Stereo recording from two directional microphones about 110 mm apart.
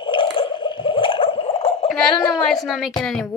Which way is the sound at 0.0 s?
50° left (ahead or behind).